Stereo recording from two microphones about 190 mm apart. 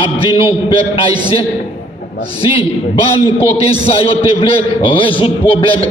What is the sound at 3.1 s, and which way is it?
A man's voice, 30° left (ahead or behind).